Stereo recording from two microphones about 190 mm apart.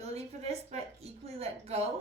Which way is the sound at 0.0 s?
35° right (ahead or behind).